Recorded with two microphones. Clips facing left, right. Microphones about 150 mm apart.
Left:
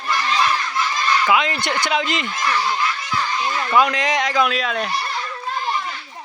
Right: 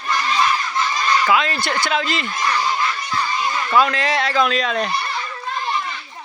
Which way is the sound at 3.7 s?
15° left (ahead or behind).